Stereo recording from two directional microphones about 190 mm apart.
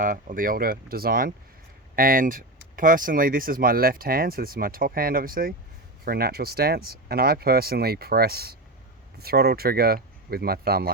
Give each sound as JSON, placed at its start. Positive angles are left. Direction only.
{"t": 0.0, "sound": "speech", "side_deg": -45}